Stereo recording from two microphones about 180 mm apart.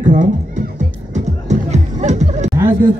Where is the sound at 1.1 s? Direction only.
40° right (ahead or behind).